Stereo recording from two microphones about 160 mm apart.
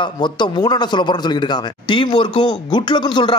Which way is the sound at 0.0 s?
30° left (ahead or behind).